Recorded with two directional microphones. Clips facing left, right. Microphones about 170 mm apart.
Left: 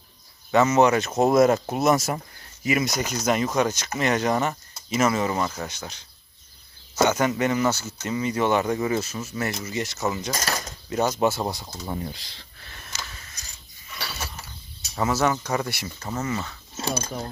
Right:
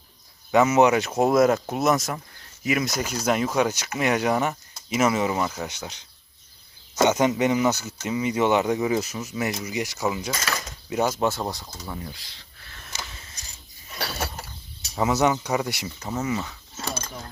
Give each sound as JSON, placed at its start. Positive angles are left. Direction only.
{"t": 0.5, "sound": "speech", "side_deg": -10}
{"t": 1.3, "sound": "speech", "side_deg": 0}
{"t": 11.2, "sound": "speech", "side_deg": 5}
{"t": 11.9, "sound": "speech", "side_deg": 25}
{"t": 13.9, "sound": "a sound", "side_deg": -50}
{"t": 14.9, "sound": "speech", "side_deg": -15}